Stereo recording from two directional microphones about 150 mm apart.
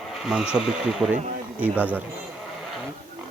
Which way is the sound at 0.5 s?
5° right (ahead or behind).